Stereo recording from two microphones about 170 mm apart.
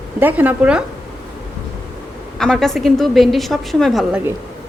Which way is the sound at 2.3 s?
5° left (ahead or behind).